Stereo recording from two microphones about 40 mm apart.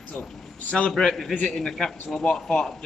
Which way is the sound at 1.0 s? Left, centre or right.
Centre.